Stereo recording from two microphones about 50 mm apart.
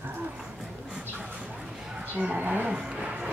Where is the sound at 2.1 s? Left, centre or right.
Right.